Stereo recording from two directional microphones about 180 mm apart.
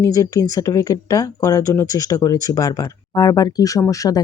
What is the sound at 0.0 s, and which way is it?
Speech, 20° left (ahead or behind).